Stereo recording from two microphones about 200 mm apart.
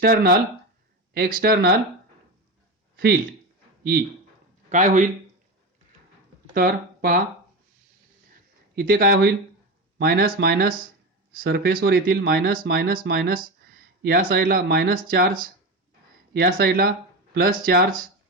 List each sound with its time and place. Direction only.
0.0 s speech: 45° right (ahead or behind)
2.9 s a sound: 50° right (ahead or behind)
4.7 s a man's voice: 40° right (ahead or behind)
6.5 s speech: 50° right (ahead or behind)
8.7 s speech: 50° right (ahead or behind)